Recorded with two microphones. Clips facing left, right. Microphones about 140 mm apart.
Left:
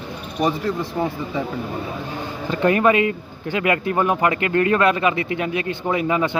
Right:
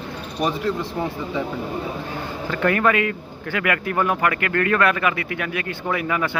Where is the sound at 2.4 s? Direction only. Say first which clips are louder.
Left 3 dB; 20° left (ahead or behind).